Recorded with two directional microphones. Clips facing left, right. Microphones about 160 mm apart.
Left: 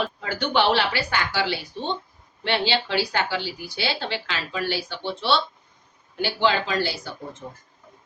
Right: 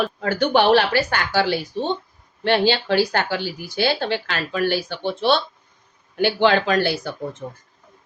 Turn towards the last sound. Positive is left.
turn(degrees=-50)  # may be behind; listen again after turning